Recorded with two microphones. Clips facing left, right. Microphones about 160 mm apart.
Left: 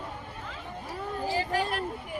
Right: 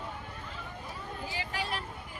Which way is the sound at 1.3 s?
45° left (ahead or behind).